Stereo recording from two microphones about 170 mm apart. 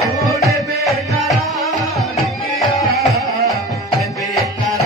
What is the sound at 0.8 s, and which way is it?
Music, centre (ahead or behind).